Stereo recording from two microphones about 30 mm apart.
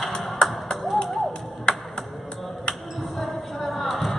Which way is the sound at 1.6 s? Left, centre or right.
Left.